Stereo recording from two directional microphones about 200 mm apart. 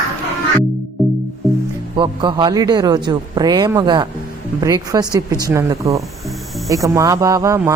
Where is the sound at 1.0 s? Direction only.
Centre (ahead or behind).